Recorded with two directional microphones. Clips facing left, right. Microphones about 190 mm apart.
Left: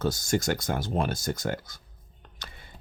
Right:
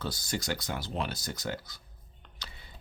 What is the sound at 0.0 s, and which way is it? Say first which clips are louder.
Speech: left 9 dB; 45° left (ahead or behind).